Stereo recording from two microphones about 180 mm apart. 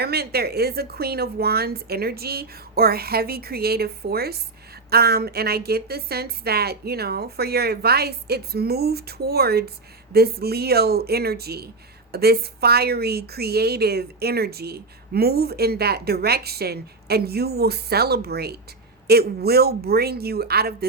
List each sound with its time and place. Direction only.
0.0 s a woman's voice: 60° right (ahead or behind)